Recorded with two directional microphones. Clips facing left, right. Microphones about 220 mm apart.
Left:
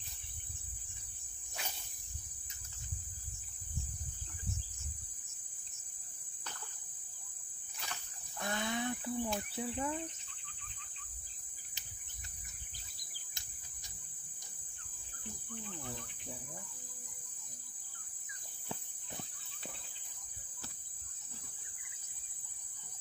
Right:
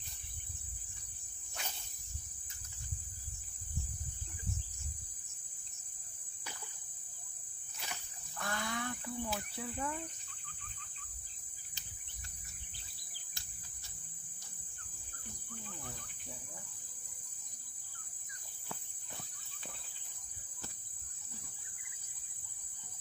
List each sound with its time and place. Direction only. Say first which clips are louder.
8.4 s cricket: left 3 dB; 20° left (ahead or behind)